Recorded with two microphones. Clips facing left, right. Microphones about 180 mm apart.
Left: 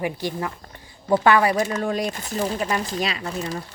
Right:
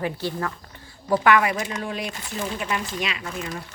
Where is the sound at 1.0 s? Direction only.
25° left (ahead or behind).